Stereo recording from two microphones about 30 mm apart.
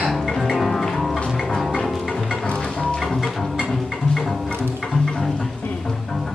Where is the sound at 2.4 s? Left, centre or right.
Left.